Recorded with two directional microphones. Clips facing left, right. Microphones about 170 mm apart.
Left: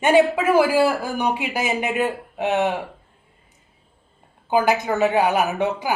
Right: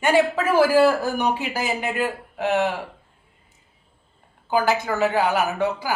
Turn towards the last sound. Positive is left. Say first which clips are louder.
# left 1 dB
turn(degrees=20)  # may be behind; listen again after turning